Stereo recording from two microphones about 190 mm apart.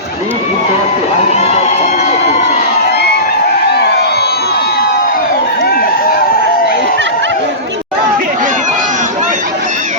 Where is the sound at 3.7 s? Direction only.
60° left (ahead or behind).